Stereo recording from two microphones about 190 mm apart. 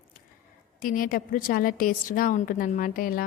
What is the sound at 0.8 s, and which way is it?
A woman's voice, 45° left (ahead or behind).